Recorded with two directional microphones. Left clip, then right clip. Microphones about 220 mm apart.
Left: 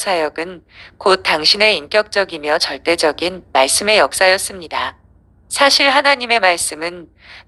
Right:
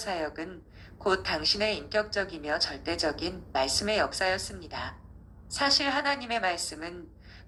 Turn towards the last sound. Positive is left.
turn(degrees=45)  # may be behind; listen again after turning